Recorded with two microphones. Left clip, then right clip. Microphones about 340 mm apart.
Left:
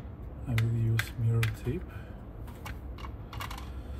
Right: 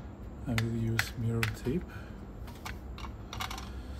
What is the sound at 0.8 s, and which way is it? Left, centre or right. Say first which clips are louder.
Music: right 2 dB; right.